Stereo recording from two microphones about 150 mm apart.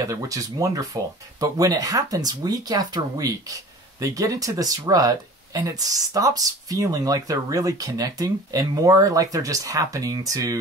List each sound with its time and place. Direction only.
0.1 s speech: 20° right (ahead or behind)